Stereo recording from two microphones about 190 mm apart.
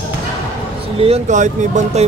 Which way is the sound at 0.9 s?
30° right (ahead or behind).